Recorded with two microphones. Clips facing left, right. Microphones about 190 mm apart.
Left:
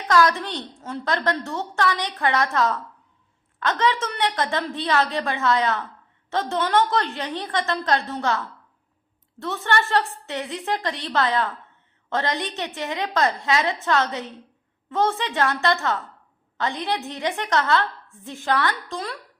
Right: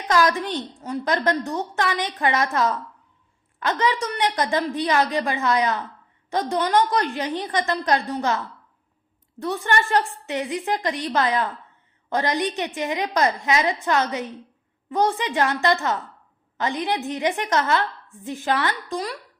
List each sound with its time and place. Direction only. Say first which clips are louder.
0.1 s a woman's voice: even; 20° right (ahead or behind)